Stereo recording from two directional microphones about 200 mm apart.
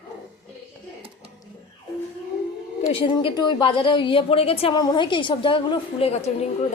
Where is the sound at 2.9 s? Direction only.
25° left (ahead or behind).